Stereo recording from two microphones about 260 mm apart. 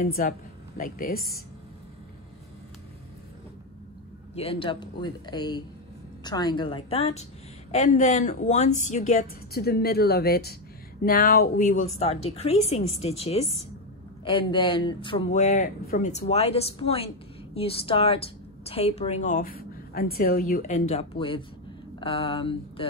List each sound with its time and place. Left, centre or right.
0.0 s a woman's voice: left
4.4 s a woman's voice: left